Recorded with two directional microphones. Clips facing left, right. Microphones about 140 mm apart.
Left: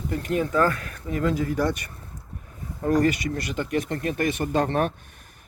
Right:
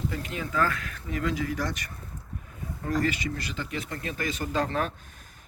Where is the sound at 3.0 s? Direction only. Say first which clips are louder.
Left 6 dB; 50° left (ahead or behind).